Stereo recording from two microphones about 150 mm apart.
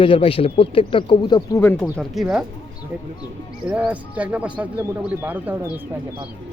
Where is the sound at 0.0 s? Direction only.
35° left (ahead or behind).